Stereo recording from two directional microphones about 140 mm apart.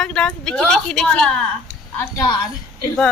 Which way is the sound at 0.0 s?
5° left (ahead or behind).